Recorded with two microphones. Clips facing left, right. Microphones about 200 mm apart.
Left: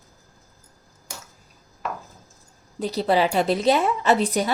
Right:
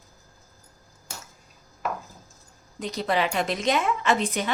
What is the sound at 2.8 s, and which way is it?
Speech, 35° left (ahead or behind).